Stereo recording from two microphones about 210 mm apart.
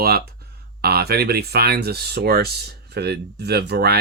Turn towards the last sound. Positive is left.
turn(degrees=-50)  # may be behind; listen again after turning